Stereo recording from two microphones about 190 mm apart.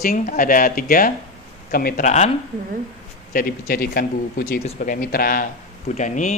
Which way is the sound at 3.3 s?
50° left (ahead or behind).